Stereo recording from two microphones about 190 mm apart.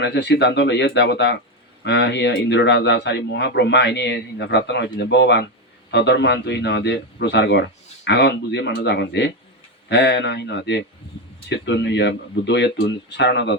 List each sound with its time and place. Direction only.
0.0 s speech: 65° left (ahead or behind)